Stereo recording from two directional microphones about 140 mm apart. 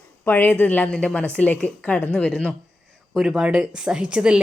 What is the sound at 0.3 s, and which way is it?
A woman's voice, 15° left (ahead or behind).